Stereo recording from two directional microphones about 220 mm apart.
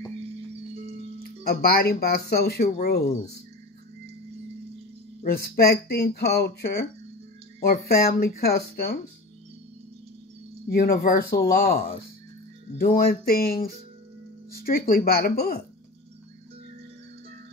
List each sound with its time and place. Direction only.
1.4 s speech: 45° left (ahead or behind)
5.2 s speech: 45° left (ahead or behind)
7.9 s speech: 40° left (ahead or behind)
10.7 s speech: 45° left (ahead or behind)
12.7 s a sound: 40° left (ahead or behind)
14.5 s speech: 40° left (ahead or behind)